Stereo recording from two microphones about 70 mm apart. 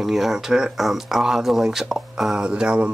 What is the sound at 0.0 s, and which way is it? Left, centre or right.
Speech, centre.